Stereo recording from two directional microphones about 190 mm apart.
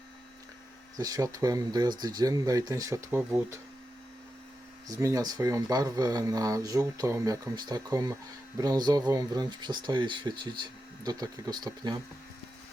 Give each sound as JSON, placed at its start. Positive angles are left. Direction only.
{"t": 0.9, "sound": "speech", "side_deg": -20}
{"t": 4.9, "sound": "speech", "side_deg": -15}